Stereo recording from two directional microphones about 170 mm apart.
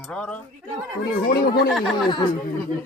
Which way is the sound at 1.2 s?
65° left (ahead or behind).